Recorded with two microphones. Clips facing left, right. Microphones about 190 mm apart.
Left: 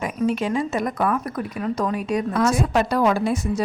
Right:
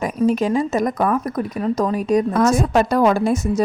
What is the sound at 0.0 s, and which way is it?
A woman's voice, 40° right (ahead or behind).